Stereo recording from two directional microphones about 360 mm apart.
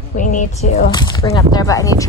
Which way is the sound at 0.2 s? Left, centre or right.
Left.